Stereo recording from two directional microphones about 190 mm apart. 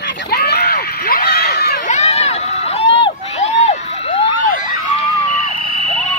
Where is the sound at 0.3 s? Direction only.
55° left (ahead or behind).